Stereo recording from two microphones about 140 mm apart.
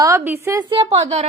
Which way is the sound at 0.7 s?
45° right (ahead or behind).